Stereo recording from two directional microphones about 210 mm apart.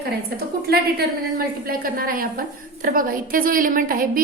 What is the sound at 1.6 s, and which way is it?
A woman's voice, 45° right (ahead or behind).